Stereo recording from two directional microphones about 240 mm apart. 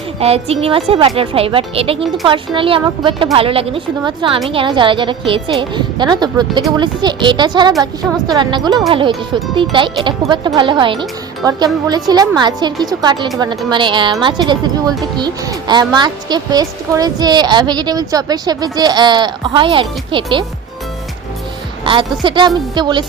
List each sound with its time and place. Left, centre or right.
0.2 s a woman's voice: right
21.8 s speech: right